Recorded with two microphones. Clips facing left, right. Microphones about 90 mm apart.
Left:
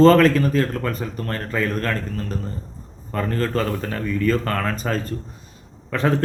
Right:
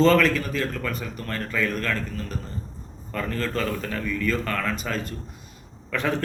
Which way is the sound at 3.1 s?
35° left (ahead or behind).